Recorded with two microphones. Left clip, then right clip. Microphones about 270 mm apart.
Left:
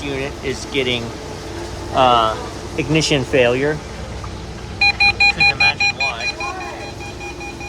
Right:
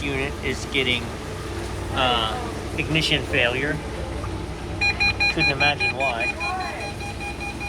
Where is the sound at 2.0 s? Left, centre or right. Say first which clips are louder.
Left 8 dB; left.